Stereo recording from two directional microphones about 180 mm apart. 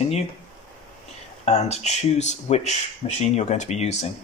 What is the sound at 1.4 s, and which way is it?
Speech, 40° left (ahead or behind).